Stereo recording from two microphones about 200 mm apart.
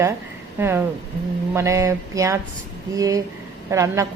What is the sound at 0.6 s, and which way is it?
Speech, 10° right (ahead or behind).